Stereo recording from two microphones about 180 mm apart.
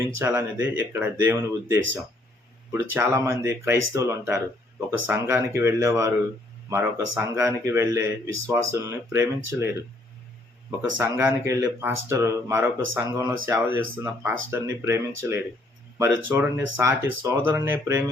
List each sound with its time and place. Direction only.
0.2 s speech: 15° right (ahead or behind)